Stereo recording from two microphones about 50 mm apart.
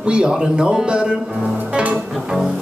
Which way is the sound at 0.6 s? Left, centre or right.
Centre.